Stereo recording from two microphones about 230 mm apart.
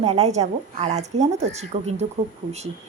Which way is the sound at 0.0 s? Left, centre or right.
Right.